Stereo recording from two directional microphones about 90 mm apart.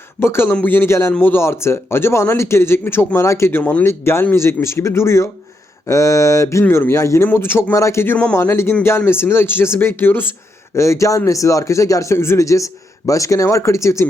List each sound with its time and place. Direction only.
0.2 s speech: 25° left (ahead or behind)
3.6 s speech: 15° left (ahead or behind)
3.8 s speech: 25° left (ahead or behind)
8.4 s speech: 30° left (ahead or behind)
10.8 s speech: 35° left (ahead or behind)